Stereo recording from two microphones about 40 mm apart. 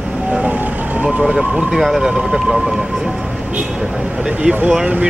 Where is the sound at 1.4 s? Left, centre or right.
Centre.